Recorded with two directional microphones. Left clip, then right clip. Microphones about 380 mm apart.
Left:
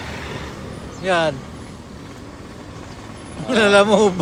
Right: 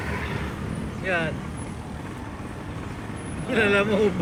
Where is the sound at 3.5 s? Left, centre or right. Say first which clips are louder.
Left 8 dB; centre.